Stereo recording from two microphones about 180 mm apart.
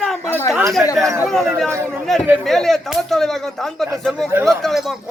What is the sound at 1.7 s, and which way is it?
Speech, 15° right (ahead or behind).